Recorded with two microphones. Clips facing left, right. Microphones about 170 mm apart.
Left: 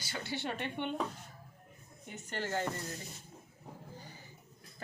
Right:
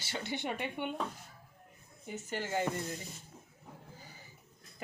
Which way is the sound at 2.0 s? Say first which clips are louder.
Right 1 dB; 5° right (ahead or behind).